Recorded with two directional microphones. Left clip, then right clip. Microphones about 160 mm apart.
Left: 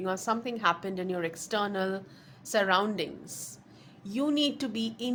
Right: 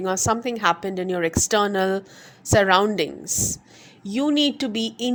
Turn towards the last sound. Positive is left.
turn(degrees=-35)  # may be behind; listen again after turning